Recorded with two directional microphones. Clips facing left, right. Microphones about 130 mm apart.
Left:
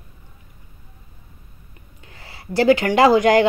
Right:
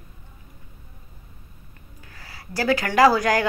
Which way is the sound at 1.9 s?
25° left (ahead or behind).